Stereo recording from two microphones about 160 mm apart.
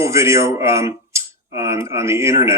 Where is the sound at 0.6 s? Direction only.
15° right (ahead or behind).